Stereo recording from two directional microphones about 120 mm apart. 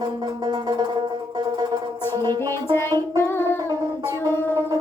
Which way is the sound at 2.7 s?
20° left (ahead or behind).